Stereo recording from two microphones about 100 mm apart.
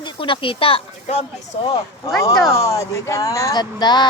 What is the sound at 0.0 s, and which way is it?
Speech, 60° left (ahead or behind).